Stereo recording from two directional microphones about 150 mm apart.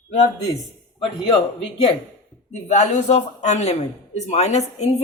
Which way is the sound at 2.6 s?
50° left (ahead or behind).